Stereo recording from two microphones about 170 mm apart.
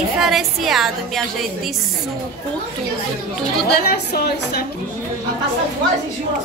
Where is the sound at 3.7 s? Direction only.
70° left (ahead or behind).